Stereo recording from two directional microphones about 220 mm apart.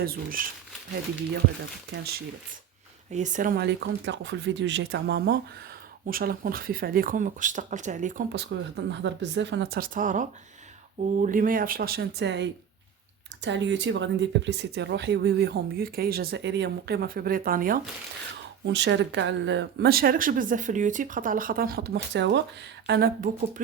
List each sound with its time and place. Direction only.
0.0 s speech: 40° right (ahead or behind)
3.1 s speech: 35° right (ahead or behind)
8.3 s speech: 50° right (ahead or behind)
18.6 s speech: 55° right (ahead or behind)